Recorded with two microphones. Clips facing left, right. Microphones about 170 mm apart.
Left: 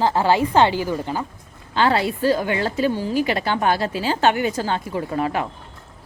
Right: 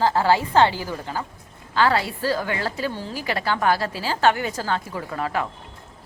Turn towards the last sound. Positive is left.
turn(degrees=25)  # may be behind; listen again after turning